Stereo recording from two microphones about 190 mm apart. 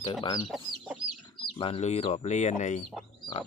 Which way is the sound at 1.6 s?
30° left (ahead or behind).